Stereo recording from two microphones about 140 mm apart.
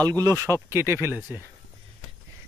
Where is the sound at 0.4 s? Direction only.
20° right (ahead or behind).